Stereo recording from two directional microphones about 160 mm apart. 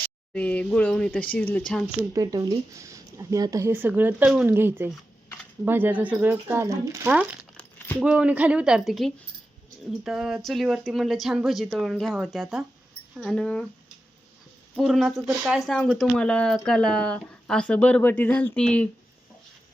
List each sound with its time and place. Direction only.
0.3 s speech: 10° left (ahead or behind)
2.0 s speech: 20° right (ahead or behind)
7.5 s a sound: 10° left (ahead or behind)
8.0 s speech: 5° right (ahead or behind)
14.8 s speech: centre (ahead or behind)